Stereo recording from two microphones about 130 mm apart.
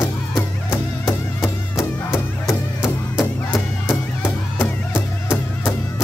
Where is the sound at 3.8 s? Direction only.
15° left (ahead or behind).